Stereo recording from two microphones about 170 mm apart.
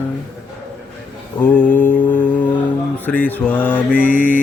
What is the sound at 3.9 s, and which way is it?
Mantra, 50° left (ahead or behind).